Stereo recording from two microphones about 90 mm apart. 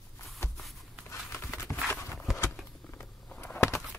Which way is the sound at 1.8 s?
25° left (ahead or behind).